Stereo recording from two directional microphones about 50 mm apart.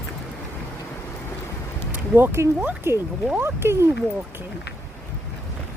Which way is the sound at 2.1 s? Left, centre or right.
Right.